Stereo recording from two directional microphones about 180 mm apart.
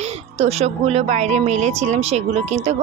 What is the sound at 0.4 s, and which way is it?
A woman's voice, 35° right (ahead or behind).